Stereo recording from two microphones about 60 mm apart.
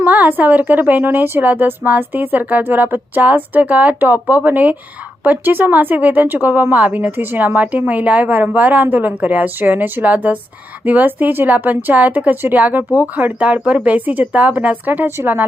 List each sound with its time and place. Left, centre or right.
0.0 s a woman's voice: right